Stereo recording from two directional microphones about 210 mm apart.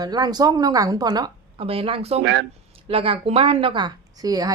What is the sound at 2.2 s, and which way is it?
Speech, 55° right (ahead or behind).